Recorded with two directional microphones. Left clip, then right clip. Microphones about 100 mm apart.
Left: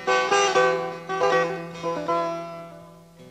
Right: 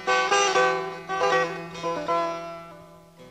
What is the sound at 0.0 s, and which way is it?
Music, 45° right (ahead or behind).